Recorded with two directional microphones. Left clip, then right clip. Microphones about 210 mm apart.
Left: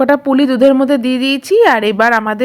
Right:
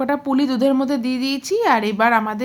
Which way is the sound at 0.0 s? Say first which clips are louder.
Left 9 dB; 25° left (ahead or behind).